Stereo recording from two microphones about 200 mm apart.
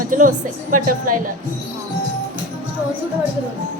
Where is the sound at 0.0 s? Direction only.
40° right (ahead or behind).